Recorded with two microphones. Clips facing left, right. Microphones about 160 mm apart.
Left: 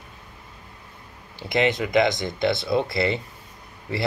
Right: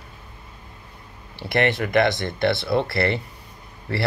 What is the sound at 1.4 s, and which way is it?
Speech, 15° left (ahead or behind).